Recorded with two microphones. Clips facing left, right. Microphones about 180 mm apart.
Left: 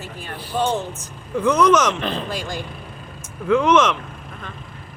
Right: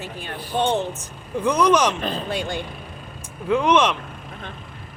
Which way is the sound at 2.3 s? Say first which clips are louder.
Right 2 dB; 65° right (ahead or behind).